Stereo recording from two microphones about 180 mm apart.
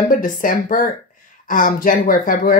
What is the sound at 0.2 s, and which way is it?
Speech, 50° left (ahead or behind).